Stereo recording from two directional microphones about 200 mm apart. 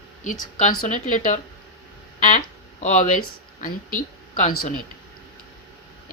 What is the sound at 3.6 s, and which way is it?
Speech, 40° left (ahead or behind).